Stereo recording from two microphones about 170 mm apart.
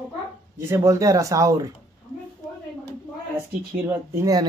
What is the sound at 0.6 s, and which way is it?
Speech, 15° right (ahead or behind).